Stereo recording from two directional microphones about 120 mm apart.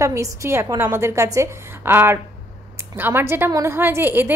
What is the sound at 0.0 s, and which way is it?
A woman's voice, 25° right (ahead or behind).